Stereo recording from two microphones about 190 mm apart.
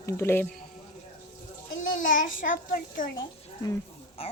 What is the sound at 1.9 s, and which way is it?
Child singing, 45° left (ahead or behind).